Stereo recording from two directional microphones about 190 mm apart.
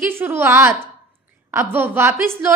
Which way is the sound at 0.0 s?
10° right (ahead or behind).